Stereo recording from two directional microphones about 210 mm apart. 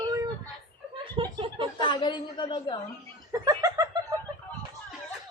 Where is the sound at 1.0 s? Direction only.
25° right (ahead or behind).